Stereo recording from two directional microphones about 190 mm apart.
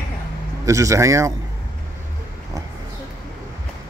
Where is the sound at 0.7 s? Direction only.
15° right (ahead or behind).